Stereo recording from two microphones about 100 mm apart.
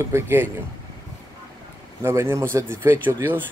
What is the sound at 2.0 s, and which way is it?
Speech, 25° right (ahead or behind).